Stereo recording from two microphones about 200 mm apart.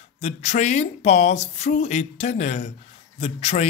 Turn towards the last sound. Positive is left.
turn(degrees=30)  # may be behind; listen again after turning